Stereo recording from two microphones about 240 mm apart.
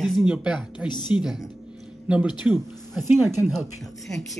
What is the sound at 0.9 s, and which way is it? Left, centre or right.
Speech, centre.